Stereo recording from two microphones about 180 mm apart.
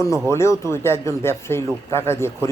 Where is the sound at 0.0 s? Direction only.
15° left (ahead or behind).